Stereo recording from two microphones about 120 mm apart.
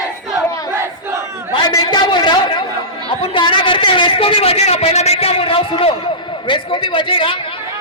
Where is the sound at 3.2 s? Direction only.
45° left (ahead or behind).